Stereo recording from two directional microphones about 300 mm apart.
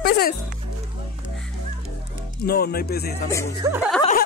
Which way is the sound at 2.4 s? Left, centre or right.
Left.